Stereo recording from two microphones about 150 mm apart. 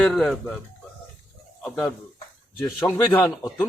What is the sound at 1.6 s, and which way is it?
A man's voice, 5° left (ahead or behind).